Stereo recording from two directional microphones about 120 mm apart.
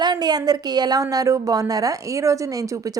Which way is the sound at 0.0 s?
35° right (ahead or behind).